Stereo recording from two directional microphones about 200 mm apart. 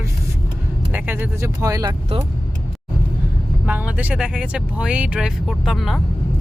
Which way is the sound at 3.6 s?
5° right (ahead or behind).